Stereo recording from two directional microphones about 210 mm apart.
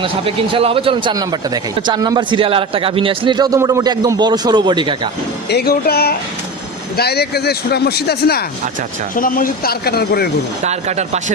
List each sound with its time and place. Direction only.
0.0 s a man's voice: 25° right (ahead or behind)
5.5 s speech: 50° left (ahead or behind)
10.6 s speech: 30° right (ahead or behind)